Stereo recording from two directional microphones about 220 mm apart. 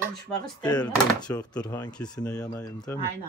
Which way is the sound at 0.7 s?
20° left (ahead or behind).